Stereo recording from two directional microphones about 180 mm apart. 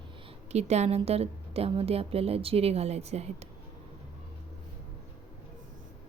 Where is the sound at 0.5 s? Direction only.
35° right (ahead or behind).